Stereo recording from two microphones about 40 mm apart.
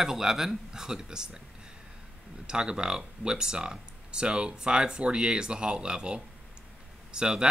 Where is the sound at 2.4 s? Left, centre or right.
Centre.